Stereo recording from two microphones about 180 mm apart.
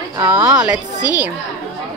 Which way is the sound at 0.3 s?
5° right (ahead or behind).